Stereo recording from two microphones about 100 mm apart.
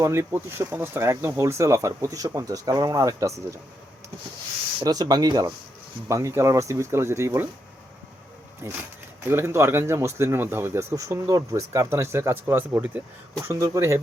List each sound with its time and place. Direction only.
0.0 s speech: 25° right (ahead or behind)
4.8 s speech: 40° right (ahead or behind)
8.6 s speech: 25° right (ahead or behind)
13.5 s speech: 30° right (ahead or behind)